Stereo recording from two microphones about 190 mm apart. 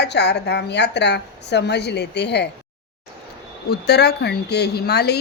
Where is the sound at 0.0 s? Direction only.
60° left (ahead or behind).